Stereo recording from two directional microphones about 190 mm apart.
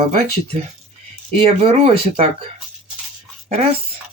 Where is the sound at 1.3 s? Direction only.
30° right (ahead or behind).